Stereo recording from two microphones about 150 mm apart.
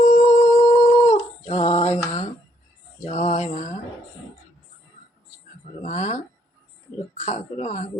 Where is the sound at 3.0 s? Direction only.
55° left (ahead or behind).